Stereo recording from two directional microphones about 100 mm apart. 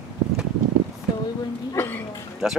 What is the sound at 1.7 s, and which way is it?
Hiccup, 20° left (ahead or behind).